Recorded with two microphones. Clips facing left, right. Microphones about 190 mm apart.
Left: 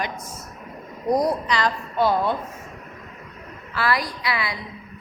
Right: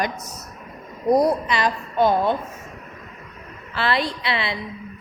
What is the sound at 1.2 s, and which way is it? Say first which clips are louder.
A woman's voice: right 2 dB; 20° right (ahead or behind).